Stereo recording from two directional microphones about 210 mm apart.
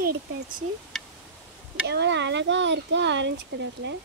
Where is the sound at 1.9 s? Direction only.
55° right (ahead or behind).